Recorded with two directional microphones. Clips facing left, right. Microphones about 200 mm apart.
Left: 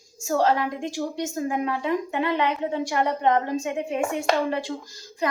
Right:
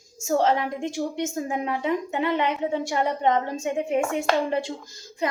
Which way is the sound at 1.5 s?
25° right (ahead or behind).